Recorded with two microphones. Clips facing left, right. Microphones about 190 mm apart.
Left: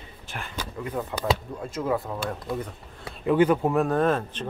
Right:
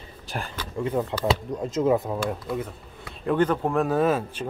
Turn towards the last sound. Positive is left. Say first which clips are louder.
# right 1 dB
turn(degrees=-10)  # may be behind; listen again after turning